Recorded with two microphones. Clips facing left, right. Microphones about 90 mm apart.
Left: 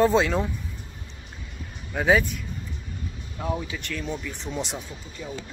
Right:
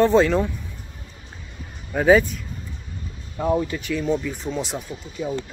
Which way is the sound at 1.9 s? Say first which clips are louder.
Right 5 dB; centre (ahead or behind).